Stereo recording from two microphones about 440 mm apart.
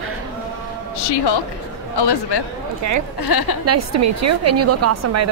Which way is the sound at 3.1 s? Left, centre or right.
Left.